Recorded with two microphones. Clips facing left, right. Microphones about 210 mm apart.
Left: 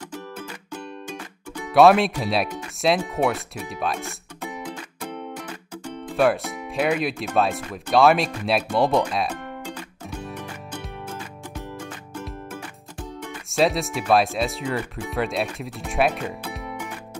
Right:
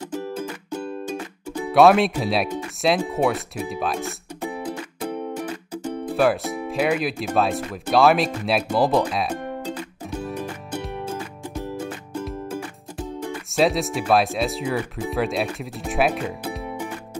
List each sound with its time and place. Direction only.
1.7 s speech: centre (ahead or behind)
4.4 s music: 35° right (ahead or behind)
5.0 s music: 10° right (ahead or behind)
6.1 s speech: centre (ahead or behind)
10.2 s music: 5° right (ahead or behind)
13.3 s speech: centre (ahead or behind)